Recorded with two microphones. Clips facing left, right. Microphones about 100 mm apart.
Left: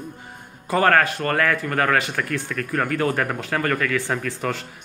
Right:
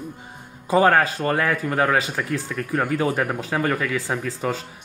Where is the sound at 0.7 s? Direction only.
15° right (ahead or behind).